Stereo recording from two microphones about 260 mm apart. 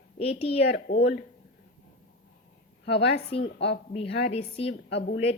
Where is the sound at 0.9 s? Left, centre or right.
Left.